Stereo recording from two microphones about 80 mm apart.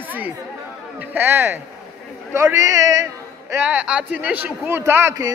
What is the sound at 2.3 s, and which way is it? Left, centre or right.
Speech, right.